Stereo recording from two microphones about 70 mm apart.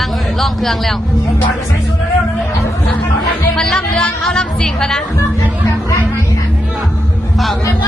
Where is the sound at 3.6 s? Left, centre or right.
Centre.